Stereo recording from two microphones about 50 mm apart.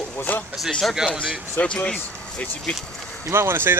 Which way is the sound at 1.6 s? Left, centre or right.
Left.